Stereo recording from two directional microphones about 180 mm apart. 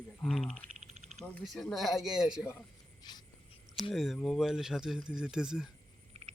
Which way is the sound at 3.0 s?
25° left (ahead or behind).